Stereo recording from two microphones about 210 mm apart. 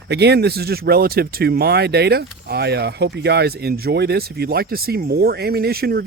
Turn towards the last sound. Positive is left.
turn(degrees=-45)  # may be behind; listen again after turning